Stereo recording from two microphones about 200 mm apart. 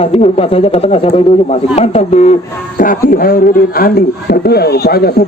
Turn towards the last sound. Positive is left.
turn(degrees=50)  # may be behind; listen again after turning